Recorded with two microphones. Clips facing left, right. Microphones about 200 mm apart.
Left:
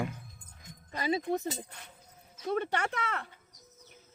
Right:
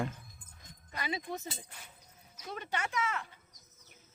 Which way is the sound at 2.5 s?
60° left (ahead or behind).